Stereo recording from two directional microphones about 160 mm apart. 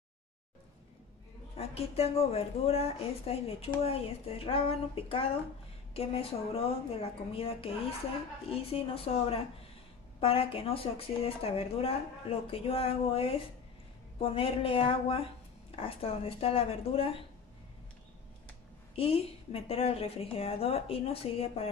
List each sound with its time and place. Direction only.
1.6 s speech: 40° left (ahead or behind)
18.9 s speech: 35° left (ahead or behind)